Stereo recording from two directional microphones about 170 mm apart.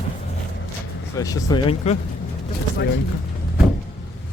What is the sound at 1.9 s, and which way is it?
Speech, 40° left (ahead or behind).